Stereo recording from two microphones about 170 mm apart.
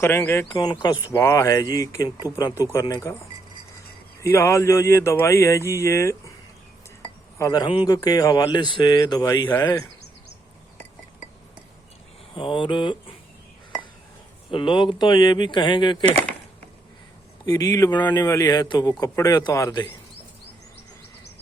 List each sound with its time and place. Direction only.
0.0 s speech: 15° left (ahead or behind)
0.5 s a man's voice: 25° left (ahead or behind)
4.2 s speech: 15° left (ahead or behind)
7.3 s a man's voice: 20° left (ahead or behind)
12.3 s a man's voice: 30° left (ahead or behind)
14.5 s a man's voice: 30° left (ahead or behind)
17.4 s a man's voice: 20° left (ahead or behind)